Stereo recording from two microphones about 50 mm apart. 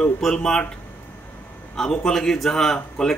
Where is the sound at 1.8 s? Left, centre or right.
Centre.